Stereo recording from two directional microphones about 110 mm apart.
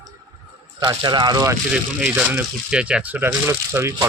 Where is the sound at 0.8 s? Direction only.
40° right (ahead or behind).